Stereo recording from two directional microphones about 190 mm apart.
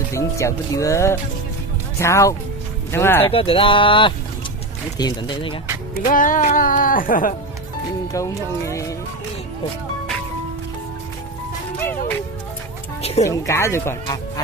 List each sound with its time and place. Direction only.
0.1 s speech: 15° left (ahead or behind)
3.3 s speech: 30° left (ahead or behind)
6.1 s music: 45° left (ahead or behind)
8.1 s speech: 15° left (ahead or behind)
11.8 s music: 10° left (ahead or behind)
13.0 s speech: 35° left (ahead or behind)
13.2 s speech: 15° left (ahead or behind)